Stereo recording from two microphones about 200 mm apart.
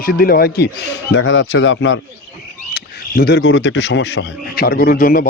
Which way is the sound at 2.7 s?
50° left (ahead or behind).